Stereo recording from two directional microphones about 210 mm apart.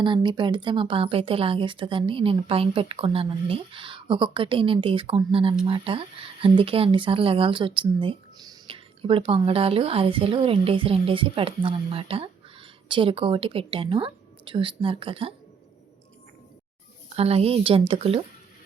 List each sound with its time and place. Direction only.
0.0 s speech: 20° right (ahead or behind)
17.2 s speech: 30° right (ahead or behind)